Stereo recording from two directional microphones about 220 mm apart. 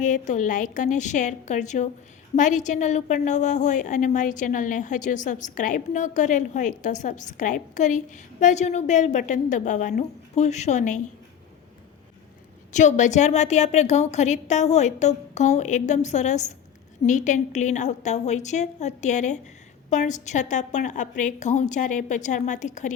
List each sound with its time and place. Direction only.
0.0 s a woman's voice: 35° left (ahead or behind)
12.7 s a woman's voice: 35° left (ahead or behind)